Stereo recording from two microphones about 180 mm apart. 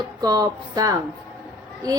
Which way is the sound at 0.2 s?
20° right (ahead or behind).